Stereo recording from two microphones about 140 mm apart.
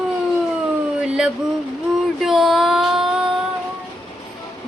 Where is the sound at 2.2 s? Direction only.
Centre (ahead or behind).